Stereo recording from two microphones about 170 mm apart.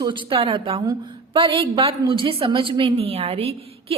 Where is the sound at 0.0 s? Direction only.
30° right (ahead or behind).